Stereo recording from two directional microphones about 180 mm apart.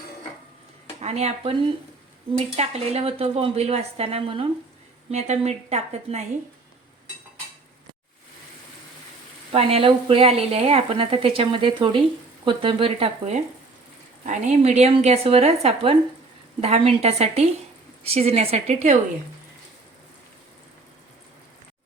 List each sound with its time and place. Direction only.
1.0 s speech: 35° right (ahead or behind)
9.5 s speech: 30° right (ahead or behind)